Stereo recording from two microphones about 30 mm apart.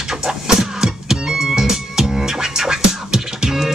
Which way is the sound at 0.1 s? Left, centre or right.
Centre.